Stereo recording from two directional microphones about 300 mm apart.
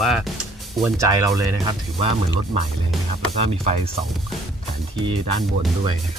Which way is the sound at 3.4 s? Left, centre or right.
Right.